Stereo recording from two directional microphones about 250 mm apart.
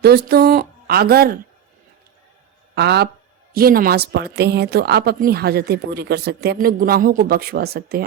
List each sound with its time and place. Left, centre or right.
0.0 s speech: right
2.7 s speech: right